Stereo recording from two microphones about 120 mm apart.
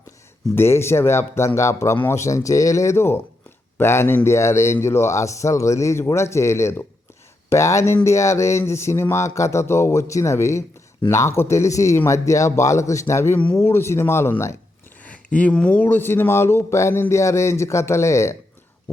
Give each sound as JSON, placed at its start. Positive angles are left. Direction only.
{"t": 0.5, "sound": "speech", "side_deg": 20}